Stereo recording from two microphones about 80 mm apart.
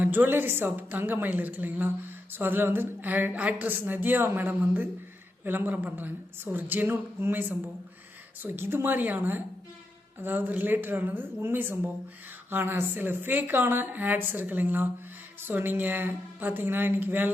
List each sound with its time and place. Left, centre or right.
0.0 s a woman's voice: right